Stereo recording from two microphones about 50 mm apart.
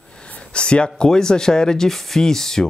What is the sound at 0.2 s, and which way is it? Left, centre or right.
Speech, left.